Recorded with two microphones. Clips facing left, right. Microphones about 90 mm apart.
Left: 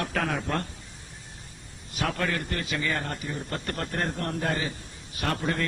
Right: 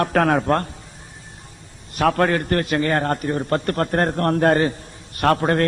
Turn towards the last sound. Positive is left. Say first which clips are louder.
# right 11 dB
turn(degrees=-60)  # may be behind; listen again after turning